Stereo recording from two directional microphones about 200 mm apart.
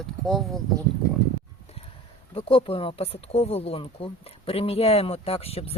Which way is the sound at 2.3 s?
25° left (ahead or behind).